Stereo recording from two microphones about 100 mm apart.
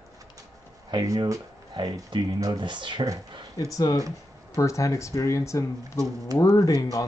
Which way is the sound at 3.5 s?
40° left (ahead or behind).